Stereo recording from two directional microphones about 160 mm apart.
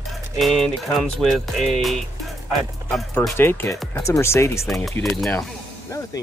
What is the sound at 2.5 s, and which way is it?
Speech, 5° left (ahead or behind).